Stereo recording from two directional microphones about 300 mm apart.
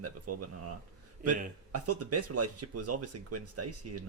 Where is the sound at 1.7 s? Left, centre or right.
Right.